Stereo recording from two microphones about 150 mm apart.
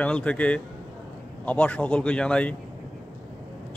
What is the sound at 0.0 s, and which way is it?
Speech, 10° left (ahead or behind).